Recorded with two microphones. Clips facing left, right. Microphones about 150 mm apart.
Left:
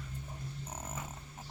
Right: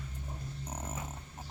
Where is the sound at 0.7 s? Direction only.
10° right (ahead or behind).